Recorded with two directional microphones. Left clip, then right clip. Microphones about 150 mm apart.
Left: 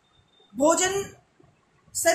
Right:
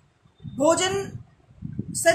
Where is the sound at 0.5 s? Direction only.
10° right (ahead or behind).